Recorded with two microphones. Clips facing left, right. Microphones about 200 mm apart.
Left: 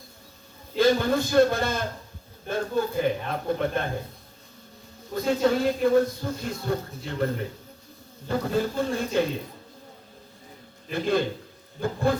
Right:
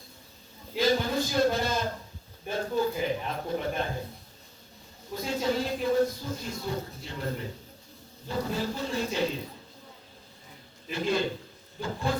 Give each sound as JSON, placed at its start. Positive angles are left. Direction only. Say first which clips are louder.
{"t": 0.8, "sound": "speech", "louder": "left 5 dB", "side_deg": 55}
{"t": 5.1, "sound": "speech", "louder": "left 6 dB", "side_deg": 55}
{"t": 8.3, "sound": "speech", "louder": "left 5 dB", "side_deg": 55}
{"t": 10.9, "sound": "speech", "louder": "left 4 dB", "side_deg": 55}